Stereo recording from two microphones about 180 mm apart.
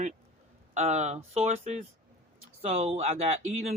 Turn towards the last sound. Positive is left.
turn(degrees=-35)  # may be behind; listen again after turning